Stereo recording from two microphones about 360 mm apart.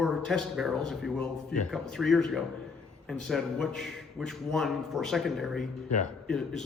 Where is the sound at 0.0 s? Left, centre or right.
Centre.